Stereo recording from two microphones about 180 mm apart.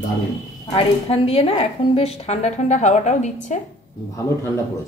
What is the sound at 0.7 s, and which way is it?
A woman's voice, 30° left (ahead or behind).